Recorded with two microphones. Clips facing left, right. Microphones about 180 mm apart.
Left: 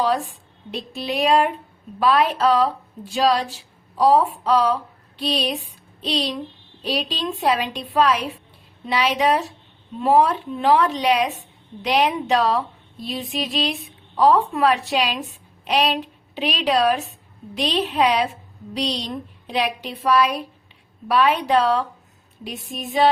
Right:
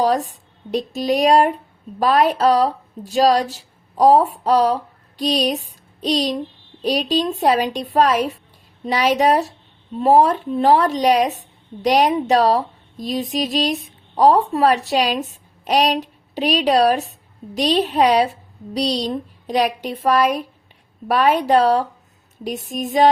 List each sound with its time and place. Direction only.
0.0 s a woman's voice: 40° right (ahead or behind)